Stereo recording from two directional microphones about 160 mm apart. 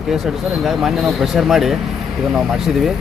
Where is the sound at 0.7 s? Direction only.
Centre (ahead or behind).